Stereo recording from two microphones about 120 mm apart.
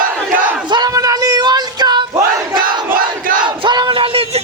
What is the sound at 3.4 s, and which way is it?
Crowd, 40° right (ahead or behind).